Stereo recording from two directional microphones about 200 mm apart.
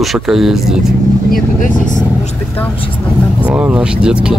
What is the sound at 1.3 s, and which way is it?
Speech, 40° left (ahead or behind).